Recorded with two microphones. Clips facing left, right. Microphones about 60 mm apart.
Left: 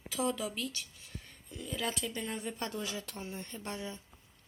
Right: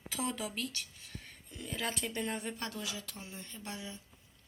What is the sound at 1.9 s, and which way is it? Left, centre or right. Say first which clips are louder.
Speech: even; right.